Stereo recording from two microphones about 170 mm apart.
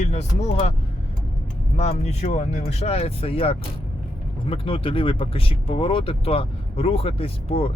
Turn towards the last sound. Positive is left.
turn(degrees=35)  # may be behind; listen again after turning